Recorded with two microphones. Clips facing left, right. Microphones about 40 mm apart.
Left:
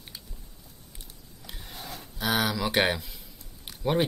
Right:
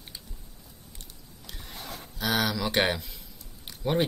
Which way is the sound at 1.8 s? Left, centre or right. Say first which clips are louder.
Even; right.